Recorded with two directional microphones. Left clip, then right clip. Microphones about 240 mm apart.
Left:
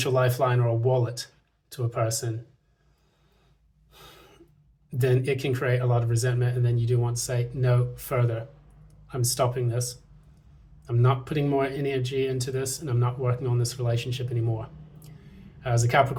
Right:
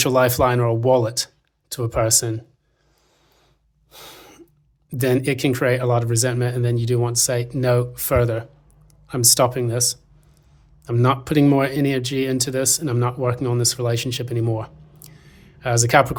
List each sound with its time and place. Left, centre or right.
0.0 s speech: right
3.9 s gasp: right
4.9 s speech: right